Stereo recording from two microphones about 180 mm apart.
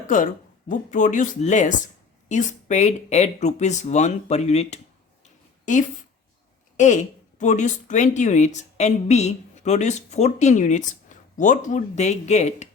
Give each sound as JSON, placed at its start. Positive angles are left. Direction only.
{"t": 0.7, "sound": "a woman's voice", "side_deg": 45}
{"t": 5.2, "sound": "a sound", "side_deg": 45}
{"t": 6.7, "sound": "a woman's voice", "side_deg": 40}